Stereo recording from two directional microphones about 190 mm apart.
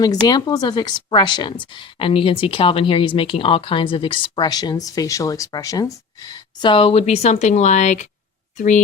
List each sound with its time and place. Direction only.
0.0 s a woman's voice: 20° left (ahead or behind); by 8.8 s 40° left (ahead or behind)